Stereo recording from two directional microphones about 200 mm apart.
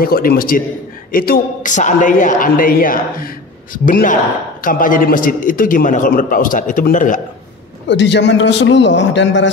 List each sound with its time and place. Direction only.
0.0 s a man's voice: 45° left (ahead or behind)
7.9 s a man's voice: 60° left (ahead or behind)